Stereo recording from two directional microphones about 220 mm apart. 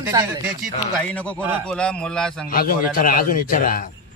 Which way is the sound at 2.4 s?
40° left (ahead or behind).